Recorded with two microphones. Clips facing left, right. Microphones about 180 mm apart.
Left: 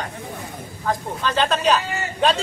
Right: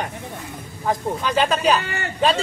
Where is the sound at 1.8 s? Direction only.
60° right (ahead or behind).